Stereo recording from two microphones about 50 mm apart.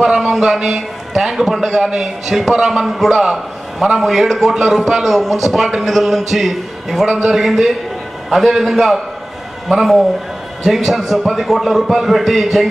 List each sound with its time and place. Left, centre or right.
0.0 s a man's voice: centre
1.8 s a man's voice: centre
2.2 s a man's voice: centre